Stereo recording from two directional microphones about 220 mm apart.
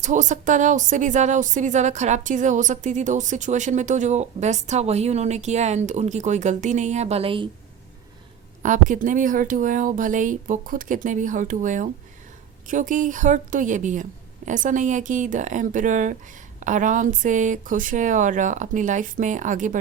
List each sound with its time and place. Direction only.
0.0 s speech: 35° right (ahead or behind)
8.6 s speech: 35° right (ahead or behind)